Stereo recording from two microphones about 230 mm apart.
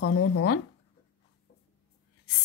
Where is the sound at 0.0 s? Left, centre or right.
Left.